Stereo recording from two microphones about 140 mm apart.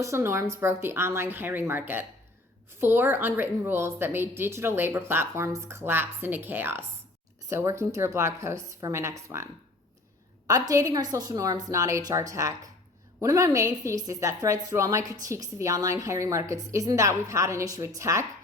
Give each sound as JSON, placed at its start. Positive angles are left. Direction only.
{"t": 0.0, "sound": "a woman's voice", "side_deg": -20}